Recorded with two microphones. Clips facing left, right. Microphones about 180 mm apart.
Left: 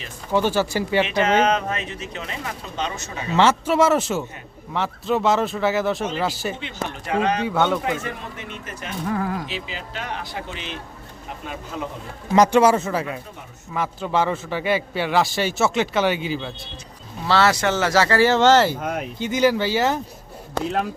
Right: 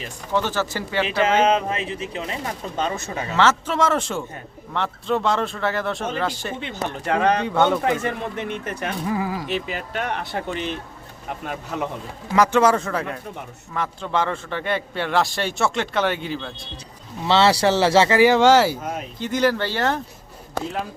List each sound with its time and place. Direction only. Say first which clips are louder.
0.3 s speech: left 3 dB; 10° left (ahead or behind)
1.4 s speech: right 1 dB; 30° right (ahead or behind)
2.7 s speech: right 3 dB; 45° right (ahead or behind)
3.3 s a man's voice: left 3 dB; 15° left (ahead or behind)
7.0 s speech: right 2 dB; 55° right (ahead or behind)
7.4 s a man's voice: right 2 dB; 5° left (ahead or behind)
8.4 s speech: right 7 dB; 60° right (ahead or behind)
9.0 s a man's voice: left 2 dB; 5° right (ahead or behind)
9.5 s speech: right 5 dB; 55° right (ahead or behind)
11.7 s speech: right 3 dB; 65° right (ahead or behind)
12.4 s a man's voice: left 2 dB; 15° left (ahead or behind)
17.2 s speech: right 2 dB; 25° right (ahead or behind); by 18.8 s 10° right (ahead or behind)
18.8 s speech: left 3 dB; 65° left (ahead or behind)
19.2 s a man's voice: left 2 dB; centre (ahead or behind)